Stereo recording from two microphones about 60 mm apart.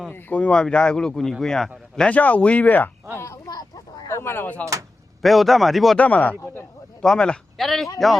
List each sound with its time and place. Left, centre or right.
0.3 s speech: centre
2.0 s speech: left
3.4 s a sound: left
4.1 s speech: left
5.2 s speech: centre
6.0 s speech: left
7.0 s speech: centre